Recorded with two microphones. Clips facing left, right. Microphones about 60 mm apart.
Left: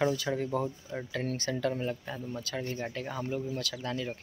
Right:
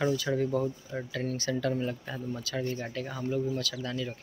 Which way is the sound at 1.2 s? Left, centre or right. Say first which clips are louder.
Right 2 dB; left.